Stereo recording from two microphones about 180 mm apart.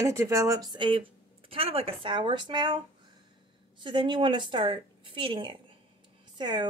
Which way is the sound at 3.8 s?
25° right (ahead or behind).